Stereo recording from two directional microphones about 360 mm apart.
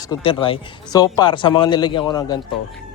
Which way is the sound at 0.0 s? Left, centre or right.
Centre.